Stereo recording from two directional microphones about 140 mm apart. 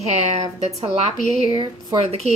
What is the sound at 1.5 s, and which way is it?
Speech, 30° right (ahead or behind).